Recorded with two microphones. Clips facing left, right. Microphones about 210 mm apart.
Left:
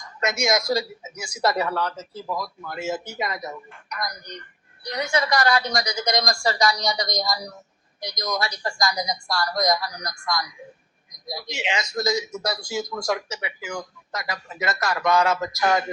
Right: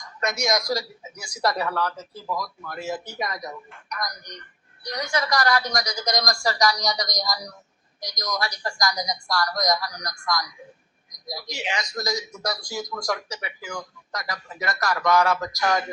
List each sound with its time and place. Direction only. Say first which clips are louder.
0.3 s a man's voice: left 2 dB; 25° left (ahead or behind)